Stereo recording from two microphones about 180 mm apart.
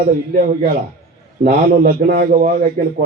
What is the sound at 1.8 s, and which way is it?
Speech, 60° right (ahead or behind).